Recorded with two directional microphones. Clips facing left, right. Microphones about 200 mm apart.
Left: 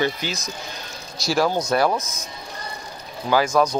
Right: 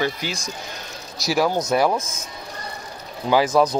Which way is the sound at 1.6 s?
20° right (ahead or behind).